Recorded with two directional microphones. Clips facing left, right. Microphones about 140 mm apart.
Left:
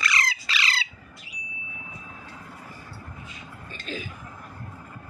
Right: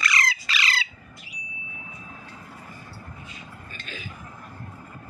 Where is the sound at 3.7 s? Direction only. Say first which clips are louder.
Left 8 dB; 35° left (ahead or behind).